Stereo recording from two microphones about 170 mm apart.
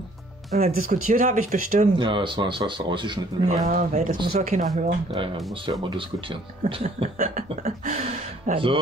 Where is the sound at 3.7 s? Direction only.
45° right (ahead or behind).